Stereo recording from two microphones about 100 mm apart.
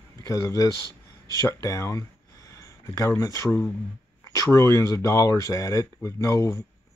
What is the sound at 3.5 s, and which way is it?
Speech, 15° left (ahead or behind).